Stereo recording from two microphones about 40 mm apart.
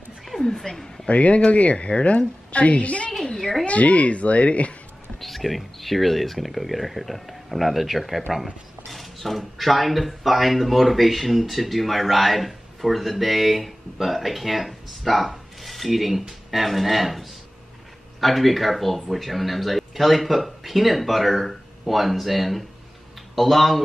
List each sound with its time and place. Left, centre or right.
0.4 s speech: centre
1.0 s a woman's voice: left
3.1 s a sound: centre
3.6 s a woman's voice: left
5.2 s speech: centre
8.8 s cutlery: centre
9.6 s speech: centre